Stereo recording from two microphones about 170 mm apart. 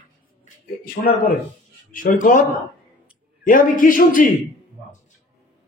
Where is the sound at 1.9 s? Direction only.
50° left (ahead or behind).